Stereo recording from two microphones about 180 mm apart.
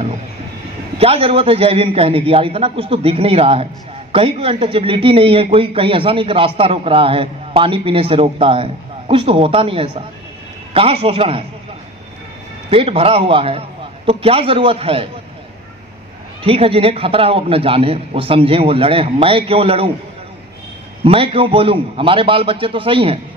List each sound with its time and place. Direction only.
0.9 s speech: 35° right (ahead or behind)
12.6 s speech: 30° right (ahead or behind)
16.4 s speech: 30° right (ahead or behind)
21.0 s a man's voice: 30° right (ahead or behind)